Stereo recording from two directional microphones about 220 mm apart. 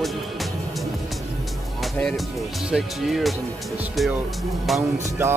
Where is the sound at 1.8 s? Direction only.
Centre (ahead or behind).